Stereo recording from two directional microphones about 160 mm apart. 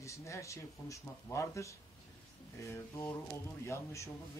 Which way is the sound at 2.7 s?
15° left (ahead or behind).